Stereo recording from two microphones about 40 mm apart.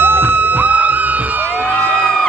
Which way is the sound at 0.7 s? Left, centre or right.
Right.